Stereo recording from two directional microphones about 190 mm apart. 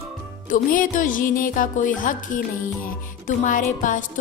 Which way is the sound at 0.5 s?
45° left (ahead or behind).